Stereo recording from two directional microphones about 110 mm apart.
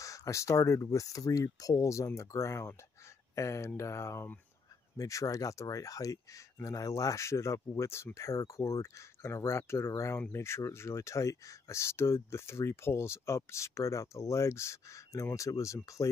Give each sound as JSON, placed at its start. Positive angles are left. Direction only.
{"t": 0.0, "sound": "speech", "side_deg": 30}